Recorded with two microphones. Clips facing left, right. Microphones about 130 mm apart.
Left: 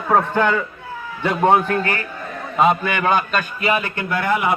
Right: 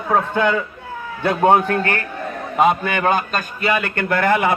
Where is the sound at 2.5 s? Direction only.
55° right (ahead or behind).